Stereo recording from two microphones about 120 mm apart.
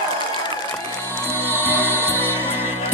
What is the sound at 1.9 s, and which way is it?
Music, 20° left (ahead or behind).